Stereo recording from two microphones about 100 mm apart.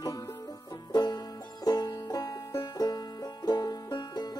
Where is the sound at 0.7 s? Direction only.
45° left (ahead or behind).